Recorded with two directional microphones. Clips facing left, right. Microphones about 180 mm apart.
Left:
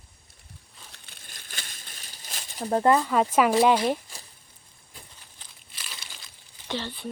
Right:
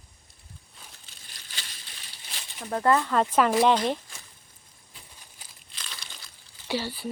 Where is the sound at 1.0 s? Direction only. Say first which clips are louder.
Left 3 dB; 50° left (ahead or behind); by 2.8 s 35° left (ahead or behind).